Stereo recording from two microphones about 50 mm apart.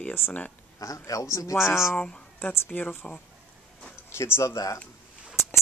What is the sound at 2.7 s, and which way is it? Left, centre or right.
Speech, left.